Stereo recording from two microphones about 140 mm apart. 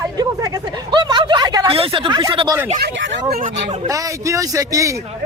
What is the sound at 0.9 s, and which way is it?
Speech, 35° right (ahead or behind).